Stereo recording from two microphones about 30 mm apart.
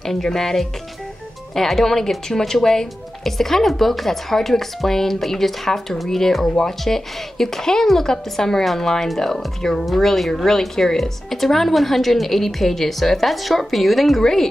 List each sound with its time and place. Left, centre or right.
0.0 s a woman's voice: centre
14.2 s speech: centre